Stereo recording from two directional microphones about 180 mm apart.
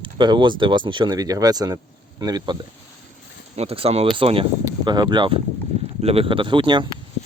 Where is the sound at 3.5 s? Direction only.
35° right (ahead or behind).